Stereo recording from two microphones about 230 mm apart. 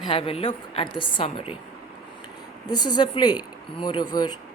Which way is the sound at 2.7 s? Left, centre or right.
Centre.